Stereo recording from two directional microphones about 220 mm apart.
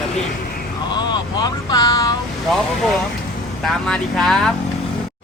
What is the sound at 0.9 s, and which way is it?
Speech, 20° left (ahead or behind).